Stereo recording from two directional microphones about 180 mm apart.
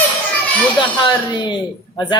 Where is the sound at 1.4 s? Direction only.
25° left (ahead or behind).